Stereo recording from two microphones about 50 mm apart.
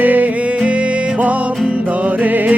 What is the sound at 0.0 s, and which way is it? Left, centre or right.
Music, right.